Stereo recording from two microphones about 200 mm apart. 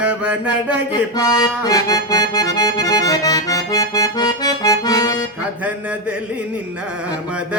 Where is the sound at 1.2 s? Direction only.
20° left (ahead or behind).